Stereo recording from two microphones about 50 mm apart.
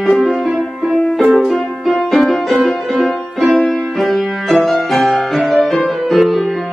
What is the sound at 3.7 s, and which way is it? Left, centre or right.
Music, centre.